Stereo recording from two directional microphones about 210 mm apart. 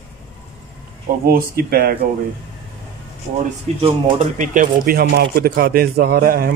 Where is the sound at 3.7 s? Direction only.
30° right (ahead or behind).